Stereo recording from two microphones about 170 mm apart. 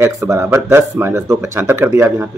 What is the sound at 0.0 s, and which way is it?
Speech, 20° right (ahead or behind).